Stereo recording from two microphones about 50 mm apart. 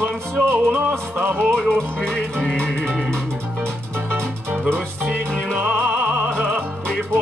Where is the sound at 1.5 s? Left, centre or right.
Centre.